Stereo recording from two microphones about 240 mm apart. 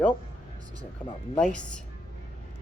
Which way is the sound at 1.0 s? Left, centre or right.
Centre.